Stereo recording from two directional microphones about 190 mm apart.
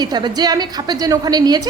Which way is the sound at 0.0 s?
20° right (ahead or behind).